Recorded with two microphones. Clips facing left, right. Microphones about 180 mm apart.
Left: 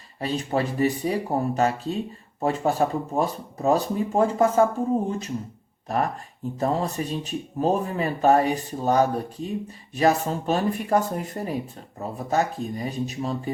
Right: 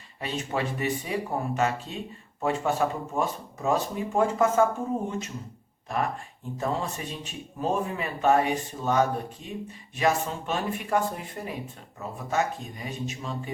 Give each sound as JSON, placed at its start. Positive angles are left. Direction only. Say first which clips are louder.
{"t": 0.2, "sound": "speech", "louder": "left 5 dB", "side_deg": 35}